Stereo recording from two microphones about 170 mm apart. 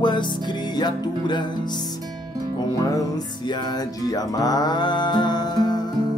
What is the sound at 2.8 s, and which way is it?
Music, 20° left (ahead or behind).